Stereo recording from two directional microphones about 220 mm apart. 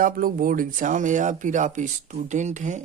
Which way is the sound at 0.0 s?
40° right (ahead or behind).